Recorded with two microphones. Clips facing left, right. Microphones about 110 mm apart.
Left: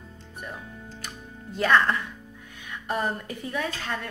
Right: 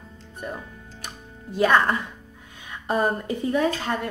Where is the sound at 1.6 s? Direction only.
20° right (ahead or behind).